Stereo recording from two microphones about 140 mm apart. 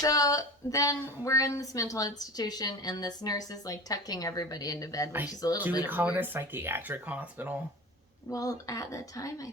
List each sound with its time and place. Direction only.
0.0 s a woman's voice: 25° left (ahead or behind)
5.8 s speech: 15° right (ahead or behind)
8.3 s a woman's voice: 25° left (ahead or behind)